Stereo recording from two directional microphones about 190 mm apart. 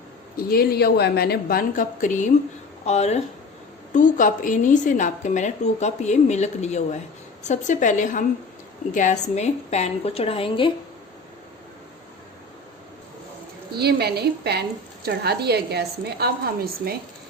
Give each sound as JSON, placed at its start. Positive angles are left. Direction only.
{"t": 0.3, "sound": "a woman's voice", "side_deg": 55}
{"t": 13.7, "sound": "a woman's voice", "side_deg": -60}